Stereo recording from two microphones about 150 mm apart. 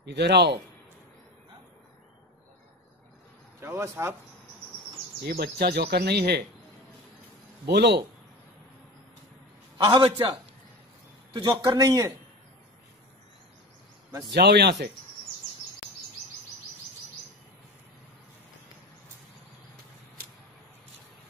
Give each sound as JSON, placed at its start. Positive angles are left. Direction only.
{"t": 0.0, "sound": "speech", "side_deg": -90}
{"t": 3.6, "sound": "speech", "side_deg": -15}
{"t": 5.2, "sound": "speech", "side_deg": -90}
{"t": 7.6, "sound": "speech", "side_deg": -90}
{"t": 9.8, "sound": "a man's voice", "side_deg": -30}
{"t": 11.3, "sound": "speech", "side_deg": -25}
{"t": 14.4, "sound": "speech", "side_deg": -90}